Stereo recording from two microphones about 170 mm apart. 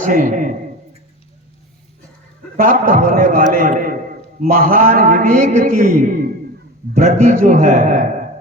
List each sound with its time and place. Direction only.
0.0 s a man's voice: 50° right (ahead or behind)
2.6 s a man's voice: 55° right (ahead or behind)